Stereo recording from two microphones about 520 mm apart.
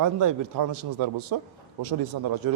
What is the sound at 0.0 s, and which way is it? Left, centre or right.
A man's voice, right.